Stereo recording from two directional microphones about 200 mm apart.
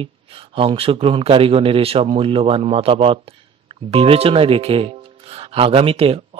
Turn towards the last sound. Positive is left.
turn(degrees=-30)  # may be behind; listen again after turning